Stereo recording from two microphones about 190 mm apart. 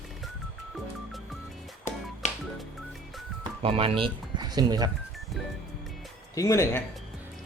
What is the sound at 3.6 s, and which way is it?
Speech, 30° right (ahead or behind).